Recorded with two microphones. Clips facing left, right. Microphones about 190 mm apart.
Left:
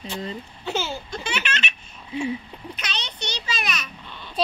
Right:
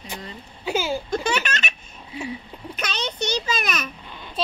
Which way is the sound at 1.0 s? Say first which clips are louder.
Right 6 dB; 45° right (ahead or behind).